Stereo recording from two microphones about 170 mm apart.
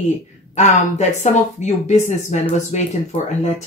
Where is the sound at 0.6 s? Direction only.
40° left (ahead or behind).